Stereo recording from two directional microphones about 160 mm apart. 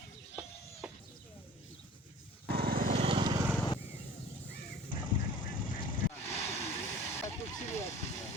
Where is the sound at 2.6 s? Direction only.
65° right (ahead or behind).